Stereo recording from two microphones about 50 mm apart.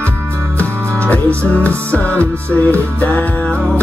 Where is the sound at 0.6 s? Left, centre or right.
Left.